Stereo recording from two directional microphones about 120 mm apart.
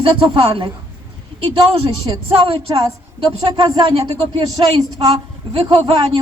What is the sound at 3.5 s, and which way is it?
Speech, 40° right (ahead or behind).